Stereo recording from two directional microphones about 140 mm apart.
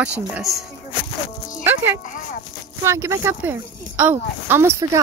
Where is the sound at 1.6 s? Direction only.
20° right (ahead or behind).